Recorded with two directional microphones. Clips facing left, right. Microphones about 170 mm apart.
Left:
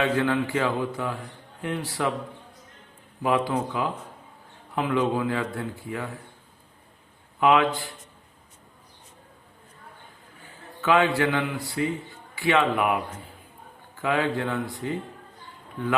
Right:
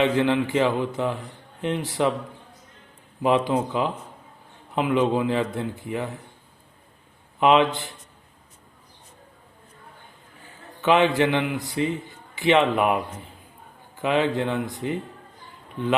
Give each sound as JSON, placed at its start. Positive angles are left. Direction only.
{"t": 0.0, "sound": "speech", "side_deg": -20}
{"t": 3.2, "sound": "speech", "side_deg": -20}
{"t": 7.3, "sound": "speech", "side_deg": -20}
{"t": 10.8, "sound": "speech", "side_deg": -20}